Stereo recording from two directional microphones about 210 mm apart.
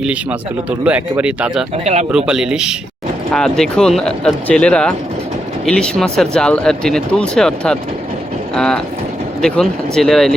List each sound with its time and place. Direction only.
0.0 s speech: 5° right (ahead or behind)
1.7 s speech: 35° right (ahead or behind)
2.1 s speech: 5° right (ahead or behind)